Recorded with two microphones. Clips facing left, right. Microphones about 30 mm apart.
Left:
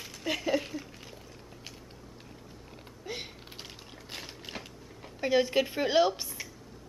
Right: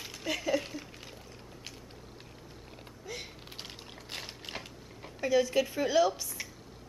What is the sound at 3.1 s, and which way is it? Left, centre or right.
Typing, left.